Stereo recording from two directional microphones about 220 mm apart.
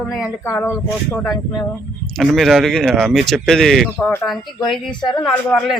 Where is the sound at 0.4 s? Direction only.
10° left (ahead or behind).